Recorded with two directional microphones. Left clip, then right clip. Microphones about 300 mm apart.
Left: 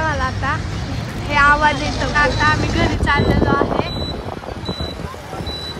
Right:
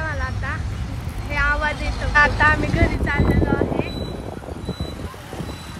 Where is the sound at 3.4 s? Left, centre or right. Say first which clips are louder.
Left 5 dB; right.